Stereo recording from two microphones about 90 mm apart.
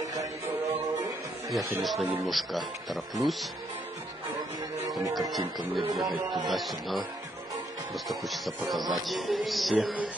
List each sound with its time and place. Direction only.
0.0 s music: 40° right (ahead or behind)
1.5 s a man's voice: centre (ahead or behind)
5.6 s a man's voice: centre (ahead or behind)
8.1 s a man's voice: centre (ahead or behind)